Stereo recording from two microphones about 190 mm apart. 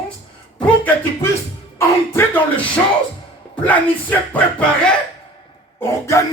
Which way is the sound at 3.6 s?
10° left (ahead or behind).